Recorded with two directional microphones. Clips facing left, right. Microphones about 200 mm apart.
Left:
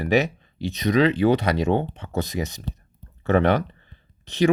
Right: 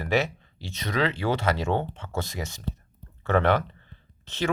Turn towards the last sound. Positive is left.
turn(degrees=15)  # may be behind; listen again after turning